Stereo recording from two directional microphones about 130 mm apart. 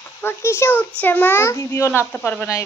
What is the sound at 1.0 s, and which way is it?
A child's voice, 15° left (ahead or behind).